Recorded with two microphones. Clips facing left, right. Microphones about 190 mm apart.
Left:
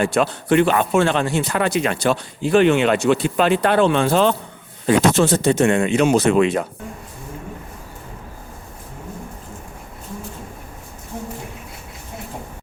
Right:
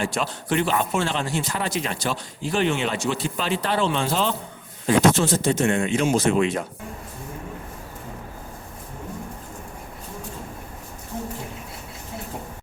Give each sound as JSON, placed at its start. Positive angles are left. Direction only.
{"t": 0.0, "sound": "speech", "side_deg": 60}